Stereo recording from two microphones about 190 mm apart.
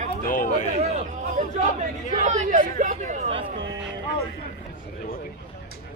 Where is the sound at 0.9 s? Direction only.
40° right (ahead or behind).